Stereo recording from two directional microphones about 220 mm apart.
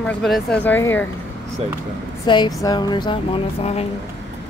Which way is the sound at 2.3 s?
20° left (ahead or behind).